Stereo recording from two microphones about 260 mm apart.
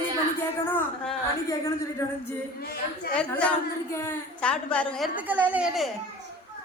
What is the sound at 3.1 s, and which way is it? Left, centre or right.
A woman's voice, centre.